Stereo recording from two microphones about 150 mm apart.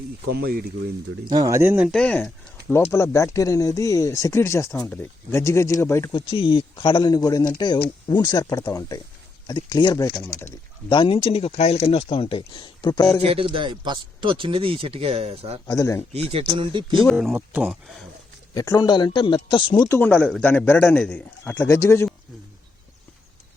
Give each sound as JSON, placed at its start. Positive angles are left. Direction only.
{"t": 0.3, "sound": "speech", "side_deg": -90}
{"t": 1.3, "sound": "speech", "side_deg": -25}
{"t": 1.9, "sound": "speech", "side_deg": 5}
{"t": 2.9, "sound": "speech", "side_deg": 20}
{"t": 6.1, "sound": "speech", "side_deg": 35}
{"t": 13.2, "sound": "speech", "side_deg": -35}
{"t": 15.6, "sound": "speech", "side_deg": 20}
{"t": 16.1, "sound": "speech", "side_deg": -35}
{"t": 17.2, "sound": "speech", "side_deg": -5}
{"t": 18.5, "sound": "speech", "side_deg": 25}
{"t": 19.9, "sound": "a man's voice", "side_deg": 10}